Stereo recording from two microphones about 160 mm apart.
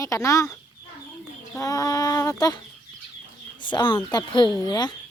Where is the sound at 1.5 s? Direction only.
20° left (ahead or behind).